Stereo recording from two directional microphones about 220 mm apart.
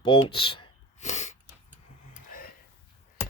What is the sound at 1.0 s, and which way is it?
Sneeze, 30° left (ahead or behind).